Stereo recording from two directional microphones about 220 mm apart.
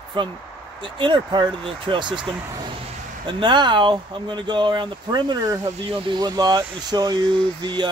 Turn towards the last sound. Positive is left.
turn(degrees=-20)  # may be behind; listen again after turning